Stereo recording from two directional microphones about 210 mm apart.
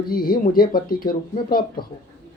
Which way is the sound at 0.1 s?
45° left (ahead or behind).